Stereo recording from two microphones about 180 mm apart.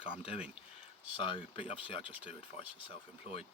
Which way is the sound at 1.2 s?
30° left (ahead or behind).